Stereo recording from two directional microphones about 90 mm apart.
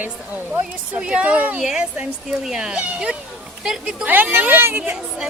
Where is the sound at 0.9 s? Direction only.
15° right (ahead or behind).